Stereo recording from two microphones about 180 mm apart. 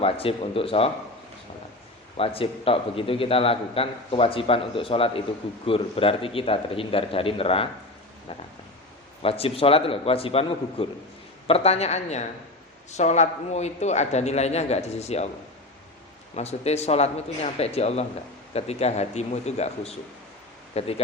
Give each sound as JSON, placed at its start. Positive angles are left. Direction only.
{"t": 0.0, "sound": "a man's voice", "side_deg": 30}
{"t": 2.1, "sound": "a man's voice", "side_deg": 30}
{"t": 9.2, "sound": "a man's voice", "side_deg": 30}
{"t": 16.3, "sound": "a man's voice", "side_deg": 35}